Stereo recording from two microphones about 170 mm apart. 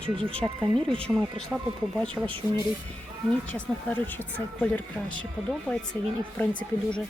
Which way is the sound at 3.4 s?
10° left (ahead or behind).